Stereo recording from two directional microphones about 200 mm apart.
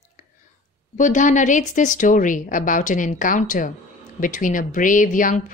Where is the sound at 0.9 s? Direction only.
40° left (ahead or behind).